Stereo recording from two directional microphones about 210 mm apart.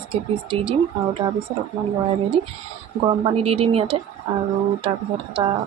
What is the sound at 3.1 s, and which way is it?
Speech, 25° right (ahead or behind).